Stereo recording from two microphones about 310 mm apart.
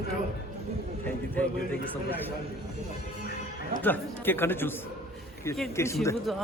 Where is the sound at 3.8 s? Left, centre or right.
Centre.